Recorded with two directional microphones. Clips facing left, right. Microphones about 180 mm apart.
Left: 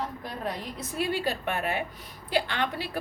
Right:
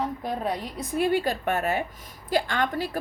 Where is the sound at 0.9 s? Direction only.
50° right (ahead or behind).